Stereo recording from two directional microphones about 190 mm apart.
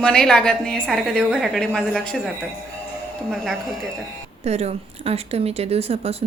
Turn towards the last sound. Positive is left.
turn(degrees=-30)  # may be behind; listen again after turning